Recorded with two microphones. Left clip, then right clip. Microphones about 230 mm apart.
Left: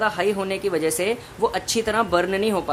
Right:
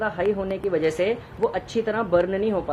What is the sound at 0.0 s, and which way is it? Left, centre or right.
Speech, centre.